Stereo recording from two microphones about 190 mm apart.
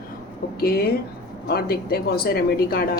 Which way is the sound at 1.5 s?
55° left (ahead or behind).